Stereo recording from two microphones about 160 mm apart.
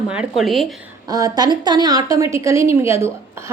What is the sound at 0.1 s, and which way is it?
Speech, 5° right (ahead or behind).